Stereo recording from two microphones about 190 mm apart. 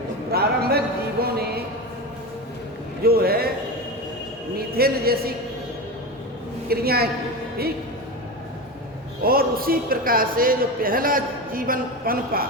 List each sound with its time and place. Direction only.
0.3 s a sound: 55° right (ahead or behind)
1.2 s music: 55° right (ahead or behind)
3.0 s a sound: 55° right (ahead or behind)
4.5 s speech: 55° right (ahead or behind)
6.7 s a woman's voice: 55° right (ahead or behind)
9.2 s a man's voice: 50° right (ahead or behind)